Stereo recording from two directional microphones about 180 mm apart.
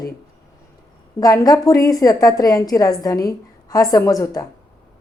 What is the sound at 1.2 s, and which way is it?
A woman's voice, 20° left (ahead or behind).